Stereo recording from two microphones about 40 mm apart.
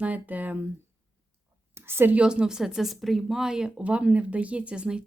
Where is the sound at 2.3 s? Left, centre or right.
Centre.